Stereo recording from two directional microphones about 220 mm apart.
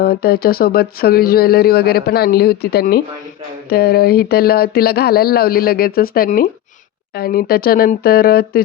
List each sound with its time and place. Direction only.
0.0 s speech: 45° left (ahead or behind)